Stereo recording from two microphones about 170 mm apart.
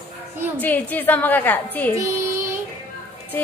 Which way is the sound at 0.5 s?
10° left (ahead or behind).